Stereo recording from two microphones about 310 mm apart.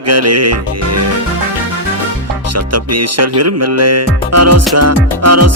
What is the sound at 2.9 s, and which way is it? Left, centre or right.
Music, right.